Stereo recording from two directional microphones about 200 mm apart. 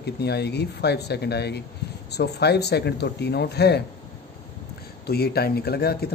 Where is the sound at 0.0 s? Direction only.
55° left (ahead or behind).